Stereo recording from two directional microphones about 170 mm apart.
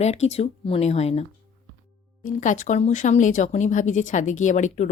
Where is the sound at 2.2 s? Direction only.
45° left (ahead or behind).